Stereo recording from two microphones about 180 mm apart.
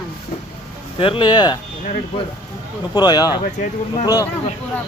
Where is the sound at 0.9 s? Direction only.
30° left (ahead or behind).